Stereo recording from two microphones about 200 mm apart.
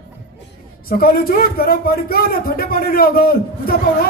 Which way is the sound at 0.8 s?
50° left (ahead or behind).